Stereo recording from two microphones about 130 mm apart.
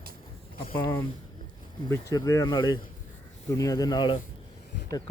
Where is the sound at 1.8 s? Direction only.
25° left (ahead or behind).